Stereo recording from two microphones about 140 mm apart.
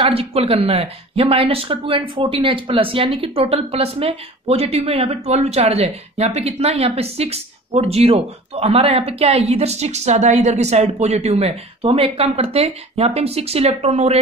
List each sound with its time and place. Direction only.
0.0 s speech: 45° right (ahead or behind)